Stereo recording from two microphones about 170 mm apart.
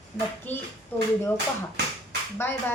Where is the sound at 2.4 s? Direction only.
15° left (ahead or behind).